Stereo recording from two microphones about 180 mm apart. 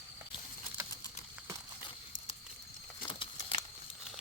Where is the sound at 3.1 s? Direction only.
30° left (ahead or behind).